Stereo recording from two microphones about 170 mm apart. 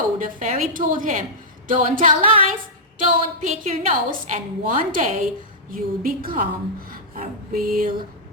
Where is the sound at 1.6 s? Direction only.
50° right (ahead or behind).